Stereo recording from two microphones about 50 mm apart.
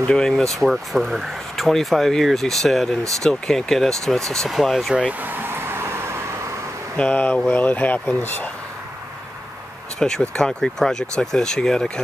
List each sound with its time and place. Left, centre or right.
0.0 s speech: centre
0.7 s speech: centre
4.5 s speech: centre
5.2 s vehicle: right
7.0 s speech: left
8.2 s speech: left
9.9 s speech: centre